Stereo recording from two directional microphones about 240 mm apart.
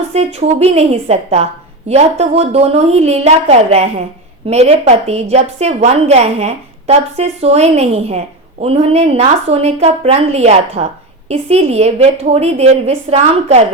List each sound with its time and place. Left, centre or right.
0.1 s a woman's voice: right